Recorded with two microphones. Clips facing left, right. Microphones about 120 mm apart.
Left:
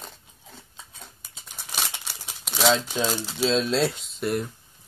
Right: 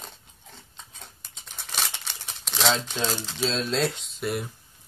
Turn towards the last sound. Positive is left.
turn(degrees=0)  # may be behind; listen again after turning